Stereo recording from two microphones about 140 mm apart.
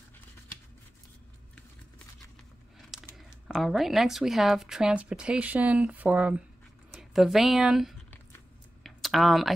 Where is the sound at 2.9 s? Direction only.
5° right (ahead or behind).